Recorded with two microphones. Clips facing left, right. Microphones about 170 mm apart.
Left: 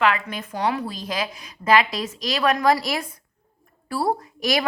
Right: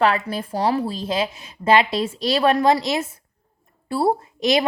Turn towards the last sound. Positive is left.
turn(degrees=-25)  # may be behind; listen again after turning